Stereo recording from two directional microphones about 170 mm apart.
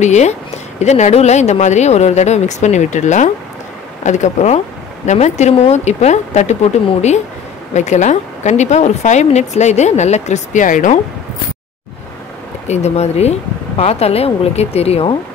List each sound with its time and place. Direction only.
0.0 s a woman's voice: 45° left (ahead or behind)
7.7 s a woman's voice: 45° left (ahead or behind)
12.6 s speech: 40° left (ahead or behind)